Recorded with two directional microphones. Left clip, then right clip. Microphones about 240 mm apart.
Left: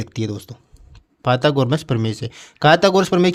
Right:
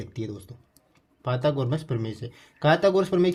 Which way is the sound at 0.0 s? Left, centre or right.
Left.